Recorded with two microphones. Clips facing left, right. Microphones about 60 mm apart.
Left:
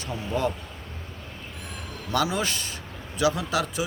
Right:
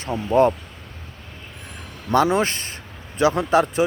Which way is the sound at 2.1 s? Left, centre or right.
Right.